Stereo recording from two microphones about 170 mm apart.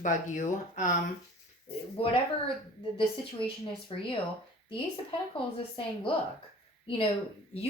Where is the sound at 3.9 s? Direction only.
30° left (ahead or behind).